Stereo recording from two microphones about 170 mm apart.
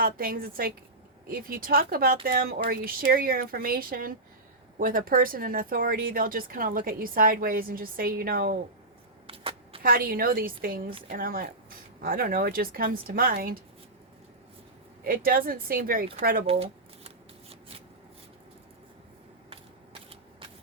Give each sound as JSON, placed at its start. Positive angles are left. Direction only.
{"t": 0.0, "sound": "speech", "side_deg": -60}
{"t": 9.2, "sound": "shuffling cards", "side_deg": -35}
{"t": 9.8, "sound": "speech", "side_deg": -60}
{"t": 15.0, "sound": "speech", "side_deg": -60}
{"t": 16.5, "sound": "shuffling cards", "side_deg": -35}